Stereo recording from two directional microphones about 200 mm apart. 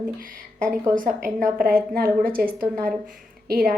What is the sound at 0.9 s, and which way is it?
A woman's voice, 45° right (ahead or behind).